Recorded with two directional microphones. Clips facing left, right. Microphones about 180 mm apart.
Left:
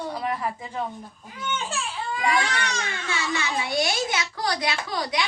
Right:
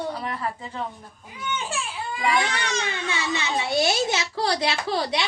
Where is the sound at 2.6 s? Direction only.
20° right (ahead or behind).